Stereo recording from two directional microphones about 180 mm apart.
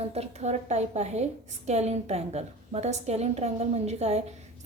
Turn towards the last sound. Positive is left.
turn(degrees=-35)  # may be behind; listen again after turning